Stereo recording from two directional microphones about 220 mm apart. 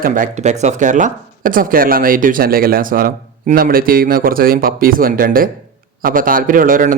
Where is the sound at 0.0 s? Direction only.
35° right (ahead or behind).